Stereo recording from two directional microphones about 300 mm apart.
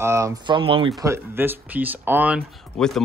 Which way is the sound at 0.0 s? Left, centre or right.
Centre.